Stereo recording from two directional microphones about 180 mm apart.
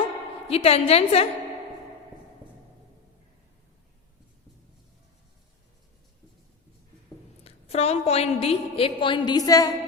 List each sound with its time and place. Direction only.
0.4 s a woman's voice: 35° left (ahead or behind)
7.4 s a woman's voice: 35° left (ahead or behind)